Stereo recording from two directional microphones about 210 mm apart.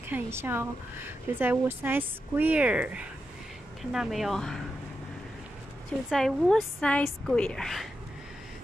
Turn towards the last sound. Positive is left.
turn(degrees=0)  # may be behind; listen again after turning